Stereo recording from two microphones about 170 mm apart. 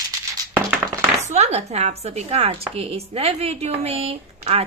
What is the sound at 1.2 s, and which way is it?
A woman's voice, 40° right (ahead or behind).